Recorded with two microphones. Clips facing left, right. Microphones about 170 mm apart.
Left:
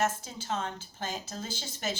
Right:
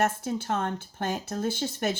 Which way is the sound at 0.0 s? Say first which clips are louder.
Right 5 dB; 60° right (ahead or behind).